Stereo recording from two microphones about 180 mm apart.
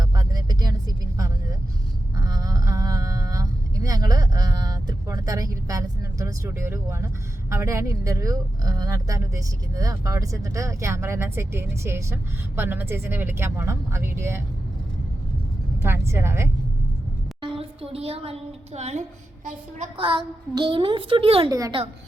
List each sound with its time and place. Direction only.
0.0 s vehicle: 20° right (ahead or behind)
7.5 s speech: 15° right (ahead or behind)
15.8 s speech: 15° right (ahead or behind)
17.4 s a sound: 30° right (ahead or behind)
20.0 s a woman's voice: 25° right (ahead or behind)
21.5 s a woman's voice: 20° right (ahead or behind)